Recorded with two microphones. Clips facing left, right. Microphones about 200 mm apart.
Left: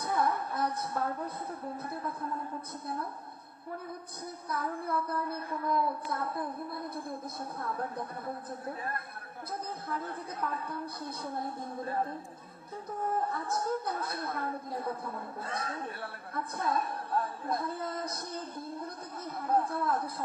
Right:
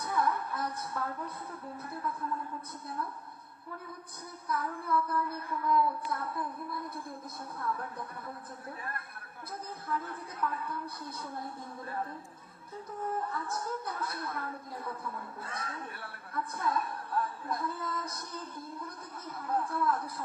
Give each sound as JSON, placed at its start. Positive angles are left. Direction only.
{"t": 0.0, "sound": "music", "side_deg": 35}
{"t": 0.5, "sound": "speech", "side_deg": 35}
{"t": 4.4, "sound": "child singing", "side_deg": 35}
{"t": 11.8, "sound": "child singing", "side_deg": 30}
{"t": 13.2, "sound": "child singing", "side_deg": 35}
{"t": 16.7, "sound": "speech", "side_deg": 35}
{"t": 19.5, "sound": "child singing", "side_deg": 35}